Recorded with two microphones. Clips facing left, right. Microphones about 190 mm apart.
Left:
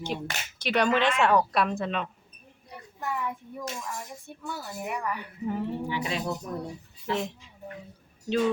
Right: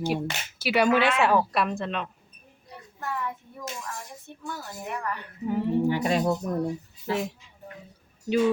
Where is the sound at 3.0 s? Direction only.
15° left (ahead or behind).